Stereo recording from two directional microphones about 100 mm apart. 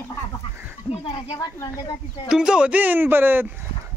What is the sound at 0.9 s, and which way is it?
Speech, 55° left (ahead or behind).